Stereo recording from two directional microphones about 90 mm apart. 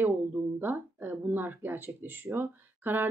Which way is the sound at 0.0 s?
25° right (ahead or behind).